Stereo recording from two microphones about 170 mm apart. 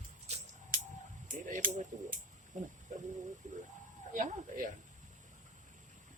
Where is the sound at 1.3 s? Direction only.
45° right (ahead or behind).